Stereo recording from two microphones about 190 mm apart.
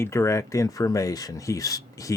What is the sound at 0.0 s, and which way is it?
Speech, 15° left (ahead or behind).